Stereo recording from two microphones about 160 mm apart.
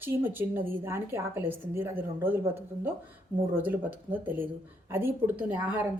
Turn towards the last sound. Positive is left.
turn(degrees=-10)  # may be behind; listen again after turning